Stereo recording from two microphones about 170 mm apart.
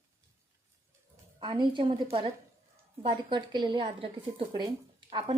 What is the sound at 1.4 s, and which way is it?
A woman's voice, 30° right (ahead or behind).